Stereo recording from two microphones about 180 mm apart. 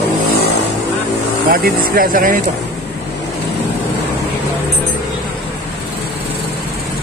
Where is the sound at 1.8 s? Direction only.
50° right (ahead or behind).